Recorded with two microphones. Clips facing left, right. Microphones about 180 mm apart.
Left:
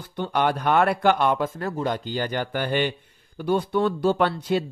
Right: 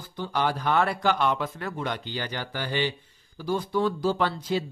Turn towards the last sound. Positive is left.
turn(degrees=60)  # may be behind; listen again after turning